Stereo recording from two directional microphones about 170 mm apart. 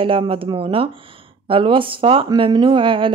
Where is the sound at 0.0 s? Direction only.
30° right (ahead or behind).